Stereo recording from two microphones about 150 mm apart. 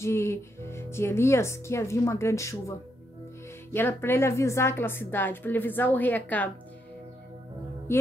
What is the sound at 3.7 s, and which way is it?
Speech, 15° left (ahead or behind).